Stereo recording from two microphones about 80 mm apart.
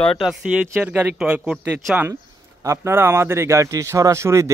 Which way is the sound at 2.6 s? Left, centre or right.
Right.